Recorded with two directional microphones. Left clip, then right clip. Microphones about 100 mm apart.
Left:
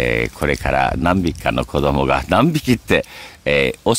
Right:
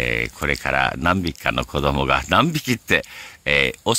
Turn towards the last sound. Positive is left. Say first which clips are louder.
# left 3 dB
turn(degrees=15)  # may be behind; listen again after turning